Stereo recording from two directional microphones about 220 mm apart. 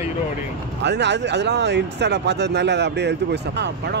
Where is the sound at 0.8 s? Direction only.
50° right (ahead or behind).